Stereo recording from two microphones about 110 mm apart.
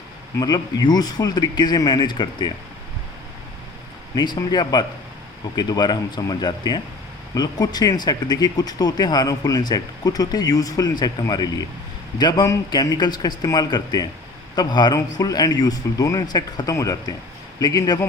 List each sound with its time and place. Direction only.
0.3 s speech: 35° left (ahead or behind)
4.1 s speech: 40° left (ahead or behind)